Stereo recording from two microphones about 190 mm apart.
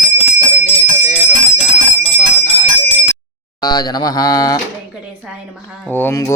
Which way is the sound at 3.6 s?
20° left (ahead or behind).